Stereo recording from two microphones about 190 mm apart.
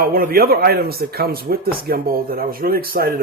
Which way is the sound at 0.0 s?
50° right (ahead or behind).